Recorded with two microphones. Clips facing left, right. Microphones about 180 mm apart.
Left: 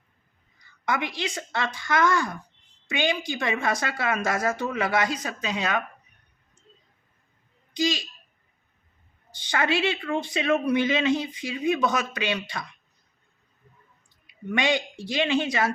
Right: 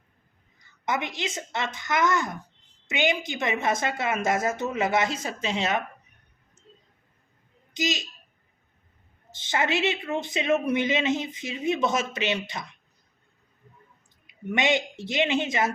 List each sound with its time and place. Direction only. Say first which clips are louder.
0.9 s speech: left 1 dB; 20° right (ahead or behind)
7.7 s speech: left 3 dB; 20° right (ahead or behind)
9.3 s speech: left 1 dB; 25° right (ahead or behind)
14.5 s speech: even; 25° right (ahead or behind)